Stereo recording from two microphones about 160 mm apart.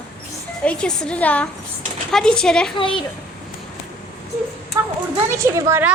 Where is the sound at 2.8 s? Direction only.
35° left (ahead or behind).